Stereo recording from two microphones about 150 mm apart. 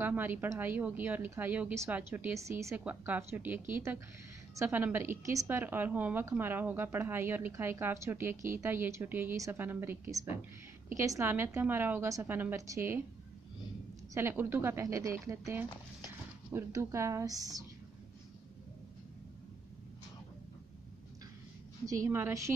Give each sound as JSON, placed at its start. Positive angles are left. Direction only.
{"t": 0.0, "sound": "a woman's voice", "side_deg": -15}
{"t": 14.1, "sound": "a woman's voice", "side_deg": -15}
{"t": 21.8, "sound": "a woman's voice", "side_deg": -20}